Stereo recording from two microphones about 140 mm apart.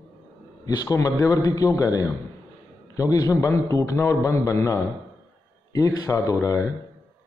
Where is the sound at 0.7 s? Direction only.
25° left (ahead or behind).